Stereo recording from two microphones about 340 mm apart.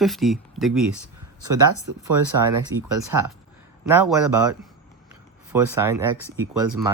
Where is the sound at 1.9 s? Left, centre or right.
Right.